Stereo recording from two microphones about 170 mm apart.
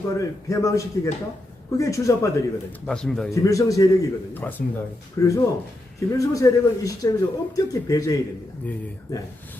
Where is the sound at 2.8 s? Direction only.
5° left (ahead or behind).